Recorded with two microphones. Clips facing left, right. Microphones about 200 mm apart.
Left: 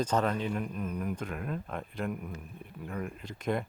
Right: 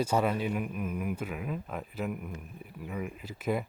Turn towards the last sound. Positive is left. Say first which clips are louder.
# right 1 dB
turn(degrees=-5)  # may be behind; listen again after turning